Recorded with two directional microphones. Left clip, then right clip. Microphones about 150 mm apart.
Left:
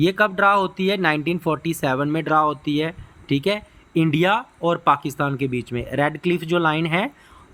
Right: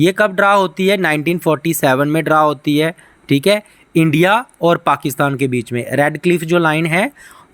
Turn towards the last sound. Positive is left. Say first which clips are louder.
# right 6 dB
turn(degrees=-35)  # may be behind; listen again after turning